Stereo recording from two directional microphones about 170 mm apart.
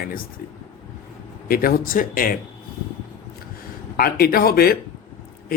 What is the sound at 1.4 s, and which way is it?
Speech, 60° left (ahead or behind).